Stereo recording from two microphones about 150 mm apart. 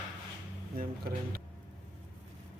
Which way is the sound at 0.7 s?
80° right.